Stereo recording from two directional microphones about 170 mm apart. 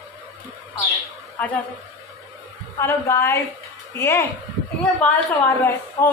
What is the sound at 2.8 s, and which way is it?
A woman's voice, 15° left (ahead or behind).